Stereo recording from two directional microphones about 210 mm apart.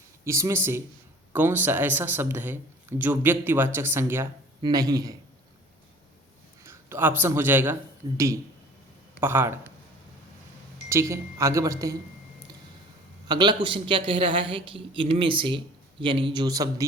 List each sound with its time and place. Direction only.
0.3 s speech: 15° right (ahead or behind)
6.6 s a man's voice: 10° right (ahead or behind)
10.8 s speech: 15° right (ahead or behind)
13.2 s a woman's voice: 20° right (ahead or behind)